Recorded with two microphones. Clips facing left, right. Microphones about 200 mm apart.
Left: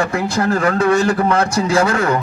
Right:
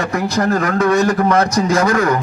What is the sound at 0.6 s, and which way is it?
A man's voice, 30° left (ahead or behind).